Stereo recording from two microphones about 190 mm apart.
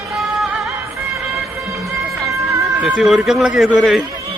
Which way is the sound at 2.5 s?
15° right (ahead or behind).